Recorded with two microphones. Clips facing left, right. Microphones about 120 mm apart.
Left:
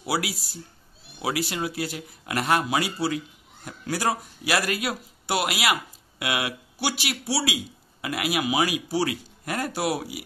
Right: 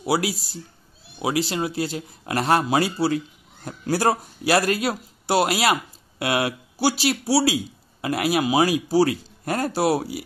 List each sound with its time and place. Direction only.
0.0 s speech: 25° right (ahead or behind)